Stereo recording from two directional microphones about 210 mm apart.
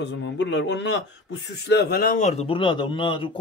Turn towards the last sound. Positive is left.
turn(degrees=25)  # may be behind; listen again after turning